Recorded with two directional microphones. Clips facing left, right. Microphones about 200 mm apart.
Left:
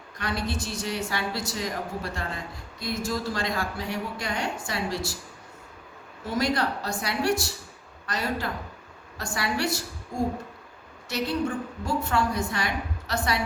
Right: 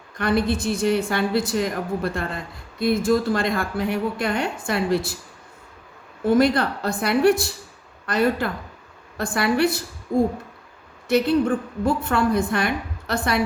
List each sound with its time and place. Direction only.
0.2 s a woman's voice: 55° right (ahead or behind)
6.2 s a woman's voice: 55° right (ahead or behind)
11.1 s a woman's voice: 55° right (ahead or behind)